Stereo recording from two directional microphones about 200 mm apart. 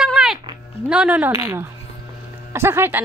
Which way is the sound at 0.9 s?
5° right (ahead or behind).